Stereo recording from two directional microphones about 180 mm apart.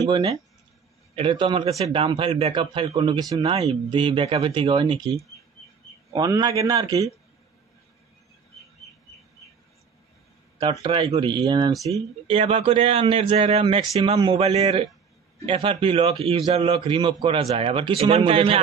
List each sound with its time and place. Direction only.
0.1 s a man's voice: 30° right (ahead or behind)
6.0 s a man's voice: 20° right (ahead or behind)
10.6 s a man's voice: 25° right (ahead or behind)